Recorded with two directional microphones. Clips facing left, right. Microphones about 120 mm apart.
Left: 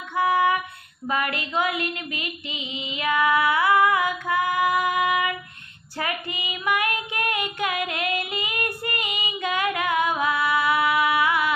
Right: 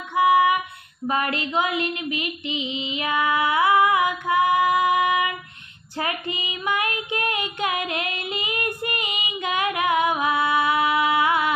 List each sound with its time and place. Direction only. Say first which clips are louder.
0.1 s female singing: right 3 dB; 15° right (ahead or behind)
1.0 s a sound: right 2 dB; 25° right (ahead or behind)
6.0 s child singing: right 2 dB; 25° right (ahead or behind)